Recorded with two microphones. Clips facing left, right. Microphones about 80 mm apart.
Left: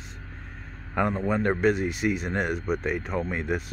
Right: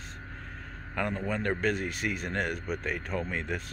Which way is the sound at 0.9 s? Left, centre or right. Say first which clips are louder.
Left 6 dB; left.